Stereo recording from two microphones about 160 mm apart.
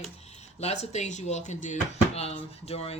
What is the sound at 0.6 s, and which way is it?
Speech, 45° left (ahead or behind).